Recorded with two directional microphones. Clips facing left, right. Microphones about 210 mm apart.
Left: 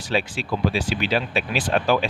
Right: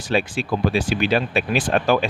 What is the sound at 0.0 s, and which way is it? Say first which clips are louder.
Speech: right 3 dB; 50° right (ahead or behind).